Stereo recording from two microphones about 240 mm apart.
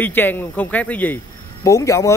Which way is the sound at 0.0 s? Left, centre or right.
Centre.